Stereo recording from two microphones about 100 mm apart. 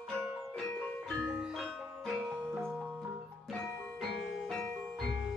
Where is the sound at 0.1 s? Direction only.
5° left (ahead or behind).